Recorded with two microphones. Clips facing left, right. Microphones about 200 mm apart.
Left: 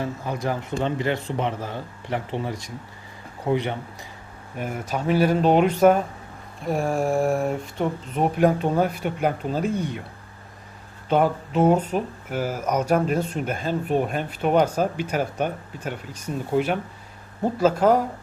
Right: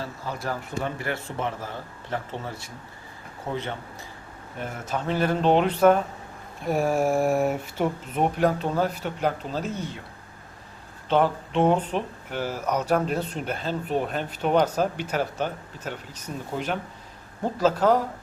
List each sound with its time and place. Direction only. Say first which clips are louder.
0.0 s speech: left 5 dB; 15° left (ahead or behind)
6.7 s speech: even; centre (ahead or behind)
8.4 s speech: left 6 dB; 15° left (ahead or behind)
11.1 s speech: left 2 dB; 10° left (ahead or behind)